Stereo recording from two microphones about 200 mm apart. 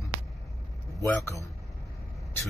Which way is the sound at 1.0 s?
15° left (ahead or behind).